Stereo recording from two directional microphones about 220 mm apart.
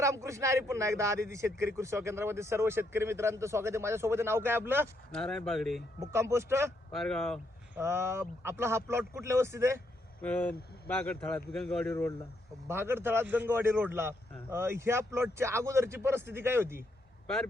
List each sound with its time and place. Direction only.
0.0 s speech: 15° right (ahead or behind)
5.1 s a man's voice: 5° left (ahead or behind)
6.0 s speech: 15° right (ahead or behind)
6.9 s a man's voice: centre (ahead or behind)
7.8 s speech: 10° right (ahead or behind)
10.2 s a man's voice: 5° left (ahead or behind)
12.6 s speech: 10° right (ahead or behind)